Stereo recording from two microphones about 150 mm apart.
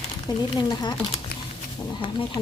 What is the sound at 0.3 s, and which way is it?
Speech, 30° left (ahead or behind).